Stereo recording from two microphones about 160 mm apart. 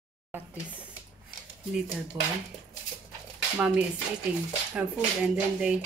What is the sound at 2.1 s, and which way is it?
Speech, 15° right (ahead or behind).